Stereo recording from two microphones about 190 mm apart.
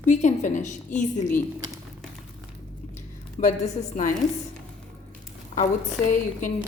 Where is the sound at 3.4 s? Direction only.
40° left (ahead or behind).